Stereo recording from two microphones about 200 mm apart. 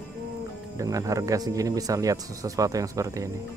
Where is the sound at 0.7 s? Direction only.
15° right (ahead or behind).